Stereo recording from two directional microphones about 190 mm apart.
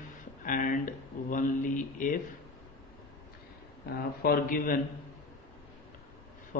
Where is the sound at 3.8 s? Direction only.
50° left (ahead or behind).